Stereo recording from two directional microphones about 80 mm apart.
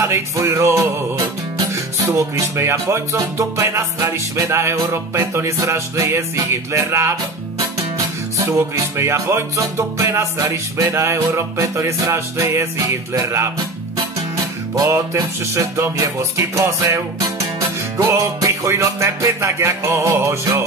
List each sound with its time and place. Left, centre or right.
0.0 s music: right
14.8 s music: right